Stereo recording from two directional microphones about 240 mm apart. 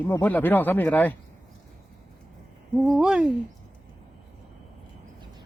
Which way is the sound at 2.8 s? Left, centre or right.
Centre.